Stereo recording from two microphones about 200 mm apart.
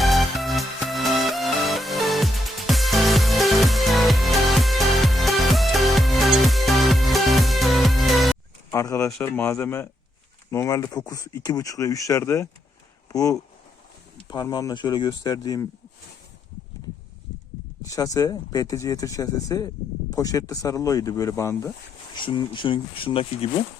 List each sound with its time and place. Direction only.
0.0 s music: centre (ahead or behind)
8.7 s speech: 15° left (ahead or behind)
9.0 s speech: 5° left (ahead or behind)
17.8 s speech: 15° left (ahead or behind)